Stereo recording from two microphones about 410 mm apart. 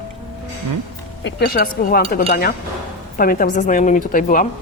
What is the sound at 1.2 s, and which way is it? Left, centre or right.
Speech, left.